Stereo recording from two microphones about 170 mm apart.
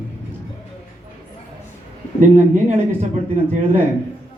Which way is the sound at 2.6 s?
40° right (ahead or behind).